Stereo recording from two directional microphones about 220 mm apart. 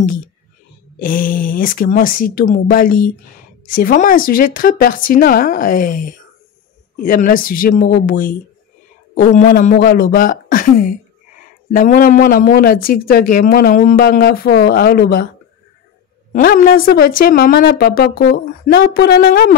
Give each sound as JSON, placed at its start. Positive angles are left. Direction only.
{"t": 0.9, "sound": "speech", "side_deg": 40}
{"t": 16.3, "sound": "a woman's voice", "side_deg": 40}